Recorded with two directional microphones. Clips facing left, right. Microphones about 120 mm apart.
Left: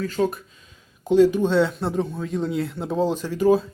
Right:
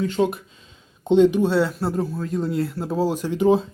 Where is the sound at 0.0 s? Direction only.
20° right (ahead or behind).